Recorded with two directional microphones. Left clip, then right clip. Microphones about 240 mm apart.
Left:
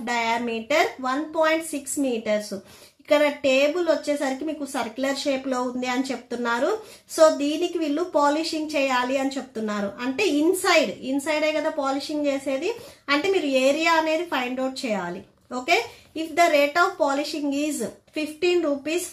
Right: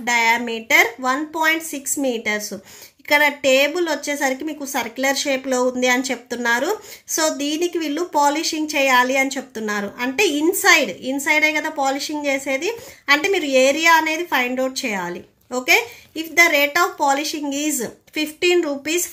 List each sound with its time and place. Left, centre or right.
0.0 s a woman's voice: right